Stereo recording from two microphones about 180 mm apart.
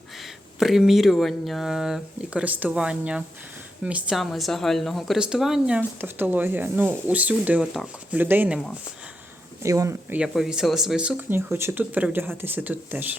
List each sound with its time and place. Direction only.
0.2 s speech: centre (ahead or behind)
9.6 s speech: 15° right (ahead or behind)
10.2 s speech: centre (ahead or behind)